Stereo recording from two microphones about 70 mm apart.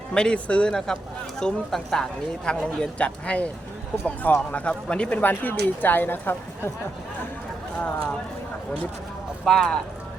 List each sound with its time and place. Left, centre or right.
0.1 s speech: centre; by 6.7 s left
9.4 s speech: centre